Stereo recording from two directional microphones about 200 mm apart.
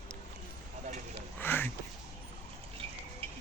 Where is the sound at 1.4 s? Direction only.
10° left (ahead or behind).